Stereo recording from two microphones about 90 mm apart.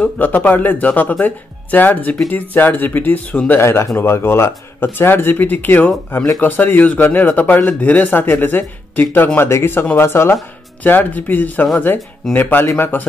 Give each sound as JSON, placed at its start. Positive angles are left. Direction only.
{"t": 0.0, "sound": "speech", "side_deg": 15}